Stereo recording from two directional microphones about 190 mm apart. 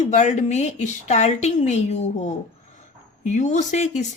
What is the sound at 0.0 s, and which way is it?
Speech, 40° left (ahead or behind).